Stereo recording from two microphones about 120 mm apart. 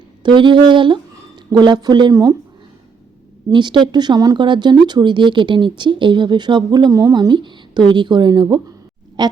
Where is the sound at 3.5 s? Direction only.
40° right (ahead or behind).